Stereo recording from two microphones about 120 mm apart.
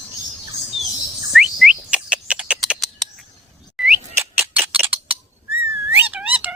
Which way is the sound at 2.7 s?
Centre (ahead or behind).